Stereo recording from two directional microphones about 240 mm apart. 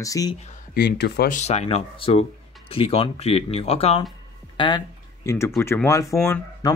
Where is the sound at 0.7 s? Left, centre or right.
Left.